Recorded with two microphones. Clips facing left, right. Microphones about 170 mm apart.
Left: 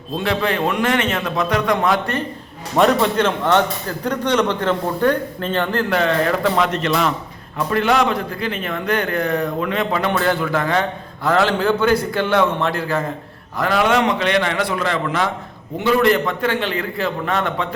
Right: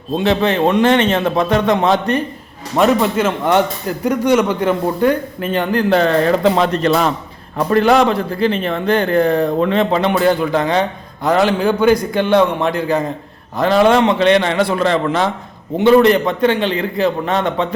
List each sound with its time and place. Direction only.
0.2 s a man's voice: 25° right (ahead or behind)
2.7 s a man's voice: centre (ahead or behind)
5.9 s a man's voice: 30° right (ahead or behind)
10.1 s a man's voice: 15° right (ahead or behind)
13.6 s a man's voice: 30° right (ahead or behind)